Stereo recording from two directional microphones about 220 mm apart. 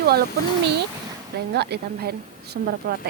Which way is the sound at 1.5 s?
50° right (ahead or behind).